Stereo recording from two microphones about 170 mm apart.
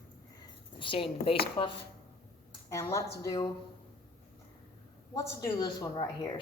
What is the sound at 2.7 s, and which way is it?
Speech, 15° left (ahead or behind).